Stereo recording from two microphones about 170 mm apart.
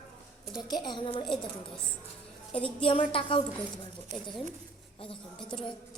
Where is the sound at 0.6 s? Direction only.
25° left (ahead or behind).